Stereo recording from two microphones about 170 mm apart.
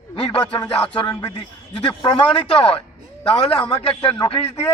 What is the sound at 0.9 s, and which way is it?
A man's voice, 20° left (ahead or behind).